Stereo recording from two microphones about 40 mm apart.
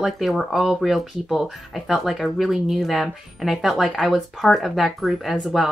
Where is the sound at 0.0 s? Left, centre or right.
Centre.